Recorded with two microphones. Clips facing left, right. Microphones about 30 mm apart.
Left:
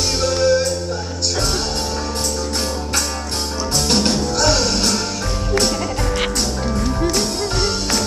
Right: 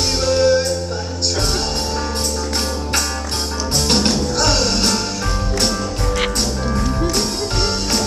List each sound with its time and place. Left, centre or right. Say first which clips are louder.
0.2 s music: right 3 dB; centre
4.4 s music: left 1 dB; centre
6.1 s music: right 1 dB; centre